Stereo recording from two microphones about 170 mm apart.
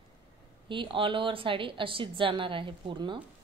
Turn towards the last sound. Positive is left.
turn(degrees=-30)  # may be behind; listen again after turning